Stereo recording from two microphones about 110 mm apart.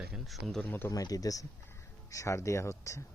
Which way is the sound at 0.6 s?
20° left (ahead or behind).